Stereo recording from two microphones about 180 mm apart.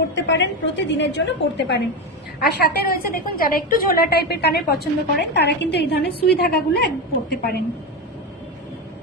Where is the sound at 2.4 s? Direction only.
60° left (ahead or behind).